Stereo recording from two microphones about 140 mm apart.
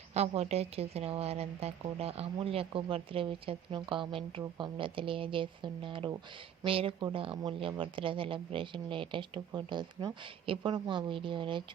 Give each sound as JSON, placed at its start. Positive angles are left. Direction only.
{"t": 0.1, "sound": "speech", "side_deg": -50}